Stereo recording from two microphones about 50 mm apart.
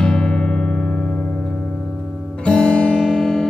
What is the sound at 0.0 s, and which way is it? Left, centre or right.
Music, centre.